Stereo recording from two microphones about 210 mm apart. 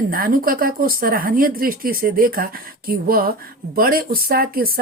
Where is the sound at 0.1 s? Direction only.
45° right (ahead or behind).